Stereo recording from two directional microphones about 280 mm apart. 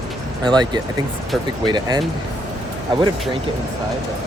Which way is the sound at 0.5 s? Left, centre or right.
Centre.